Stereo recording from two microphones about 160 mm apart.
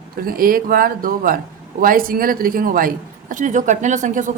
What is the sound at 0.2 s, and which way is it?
Speech, 65° right (ahead or behind).